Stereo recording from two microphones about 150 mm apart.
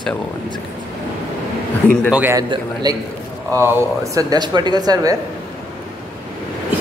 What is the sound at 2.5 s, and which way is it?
Speech, 30° right (ahead or behind).